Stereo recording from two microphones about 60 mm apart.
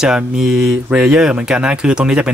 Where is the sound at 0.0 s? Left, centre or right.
Centre.